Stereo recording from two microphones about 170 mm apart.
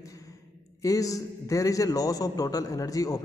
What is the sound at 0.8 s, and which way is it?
A man's voice, 20° left (ahead or behind).